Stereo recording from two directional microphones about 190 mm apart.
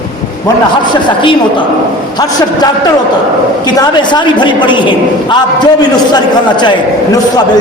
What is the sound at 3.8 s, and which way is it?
A man's voice, 25° left (ahead or behind).